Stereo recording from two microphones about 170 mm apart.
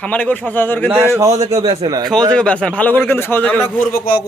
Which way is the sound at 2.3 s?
5° left (ahead or behind).